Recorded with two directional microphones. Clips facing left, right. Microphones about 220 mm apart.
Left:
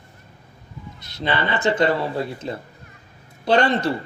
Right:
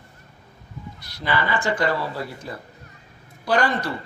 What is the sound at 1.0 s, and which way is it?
A man's voice, 25° left (ahead or behind).